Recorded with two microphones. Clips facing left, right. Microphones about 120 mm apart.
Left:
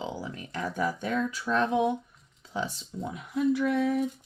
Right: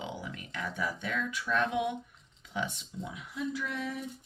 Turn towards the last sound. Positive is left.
turn(degrees=50)  # may be behind; listen again after turning